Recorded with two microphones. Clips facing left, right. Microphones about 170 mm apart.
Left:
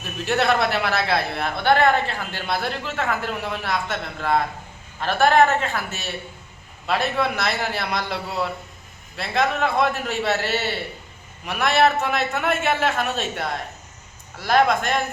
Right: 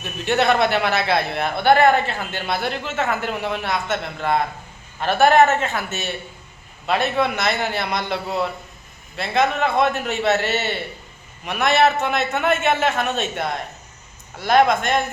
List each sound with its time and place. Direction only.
0.3 s a man's voice: centre (ahead or behind)